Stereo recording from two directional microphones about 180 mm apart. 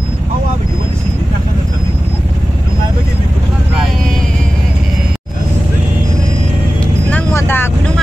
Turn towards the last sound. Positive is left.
turn(degrees=15)  # may be behind; listen again after turning